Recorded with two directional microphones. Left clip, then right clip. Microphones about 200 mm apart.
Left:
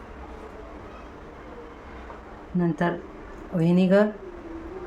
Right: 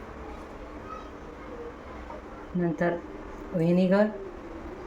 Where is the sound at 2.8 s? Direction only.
15° left (ahead or behind).